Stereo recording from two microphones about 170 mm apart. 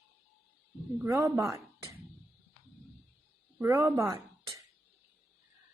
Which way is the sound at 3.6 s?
15° right (ahead or behind).